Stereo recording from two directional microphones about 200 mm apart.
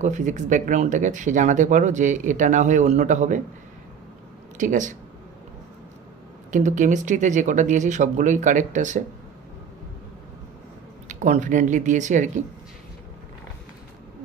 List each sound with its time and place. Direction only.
0.0 s speech: 35° right (ahead or behind)
4.6 s speech: 40° right (ahead or behind)
6.5 s speech: 40° right (ahead or behind)
11.1 s speech: 35° right (ahead or behind)